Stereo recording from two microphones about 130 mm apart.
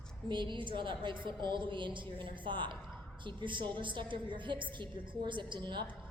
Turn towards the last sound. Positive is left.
turn(degrees=-35)  # may be behind; listen again after turning